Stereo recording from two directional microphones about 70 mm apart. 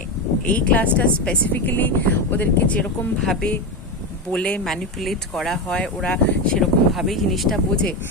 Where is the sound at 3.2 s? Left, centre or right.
Centre.